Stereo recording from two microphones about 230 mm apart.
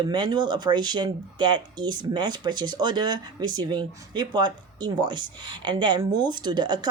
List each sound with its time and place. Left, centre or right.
0.0 s speech: centre